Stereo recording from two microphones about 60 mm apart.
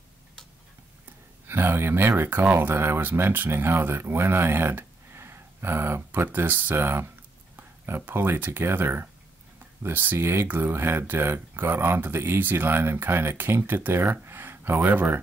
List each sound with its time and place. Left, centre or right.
1.5 s speech: right
7.5 s a sound: right
8.0 s speech: right